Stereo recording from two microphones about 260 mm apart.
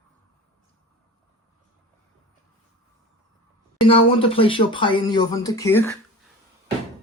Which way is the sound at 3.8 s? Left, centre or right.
Left.